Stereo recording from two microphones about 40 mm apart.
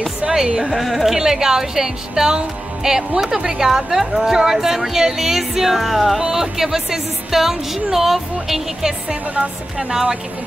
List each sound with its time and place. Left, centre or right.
0.2 s speech: centre
0.7 s speech: centre
1.1 s speech: centre
9.1 s speech: right
9.8 s speech: centre